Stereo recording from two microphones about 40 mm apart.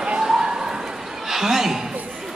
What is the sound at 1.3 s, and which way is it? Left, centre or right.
Chuckle, centre.